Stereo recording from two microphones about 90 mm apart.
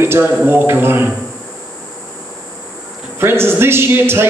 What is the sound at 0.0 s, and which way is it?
A man's voice, 25° right (ahead or behind).